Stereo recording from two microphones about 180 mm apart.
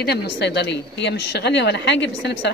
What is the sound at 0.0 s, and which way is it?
Speech, 65° left (ahead or behind).